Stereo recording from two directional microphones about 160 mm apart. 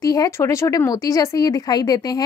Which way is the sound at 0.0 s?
20° left (ahead or behind).